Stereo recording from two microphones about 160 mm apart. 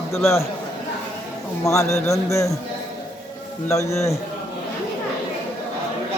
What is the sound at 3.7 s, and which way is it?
Speech, 20° left (ahead or behind).